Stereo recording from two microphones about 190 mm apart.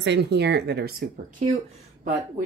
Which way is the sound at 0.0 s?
65° right (ahead or behind).